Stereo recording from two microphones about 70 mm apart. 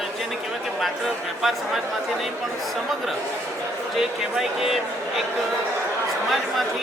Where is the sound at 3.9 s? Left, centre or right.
Centre.